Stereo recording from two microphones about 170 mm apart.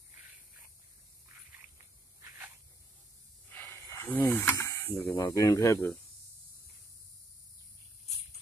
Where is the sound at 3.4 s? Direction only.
10° left (ahead or behind).